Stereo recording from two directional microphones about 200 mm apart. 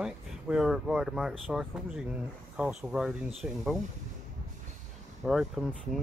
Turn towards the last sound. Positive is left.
turn(degrees=0)  # may be behind; listen again after turning